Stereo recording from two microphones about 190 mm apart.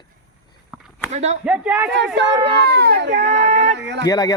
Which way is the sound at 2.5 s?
60° right (ahead or behind).